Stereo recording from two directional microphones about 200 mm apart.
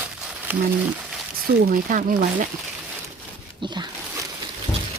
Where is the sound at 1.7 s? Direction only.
45° right (ahead or behind).